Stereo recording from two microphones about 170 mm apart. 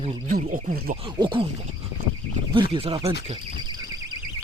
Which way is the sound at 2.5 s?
30° right (ahead or behind).